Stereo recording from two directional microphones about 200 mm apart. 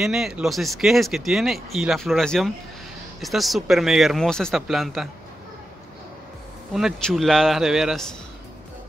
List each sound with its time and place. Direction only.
0.0 s speech: centre (ahead or behind)
6.7 s speech: centre (ahead or behind)